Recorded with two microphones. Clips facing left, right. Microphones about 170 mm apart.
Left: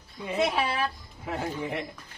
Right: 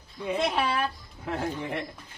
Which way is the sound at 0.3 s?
5° left (ahead or behind).